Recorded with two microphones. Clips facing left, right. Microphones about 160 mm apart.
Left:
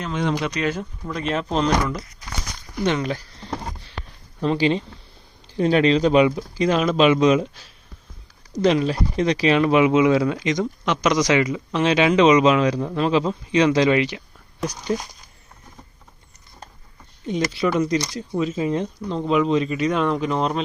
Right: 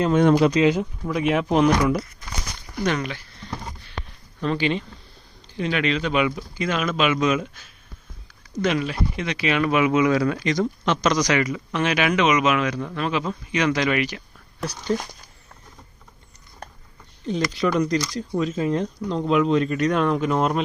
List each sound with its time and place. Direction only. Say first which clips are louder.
0.1 s speech: right 5 dB; 50° right (ahead or behind)
0.6 s speech: right 6 dB; 15° right (ahead or behind)
2.8 s speech: left 2 dB; 25° left (ahead or behind)
4.4 s speech: left 3 dB; 30° left (ahead or behind)
14.9 s speech: right 1 dB; 10° left (ahead or behind)
17.2 s speech: left 1 dB; 5° left (ahead or behind)